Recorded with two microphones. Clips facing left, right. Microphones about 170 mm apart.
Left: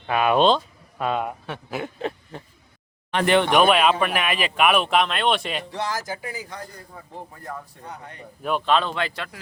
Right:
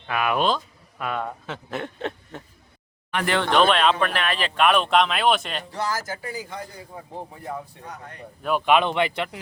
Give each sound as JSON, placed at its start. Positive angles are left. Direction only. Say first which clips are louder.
{"t": 0.1, "sound": "speech", "louder": "left 5 dB", "side_deg": 25}
{"t": 1.7, "sound": "a sound", "louder": "left 1 dB", "side_deg": 0}
{"t": 3.1, "sound": "speech", "louder": "left 4 dB", "side_deg": 30}
{"t": 3.3, "sound": "speech", "louder": "left 2 dB", "side_deg": 15}
{"t": 5.9, "sound": "speech", "louder": "even", "side_deg": 20}
{"t": 6.3, "sound": "a man's voice", "louder": "right 2 dB", "side_deg": 0}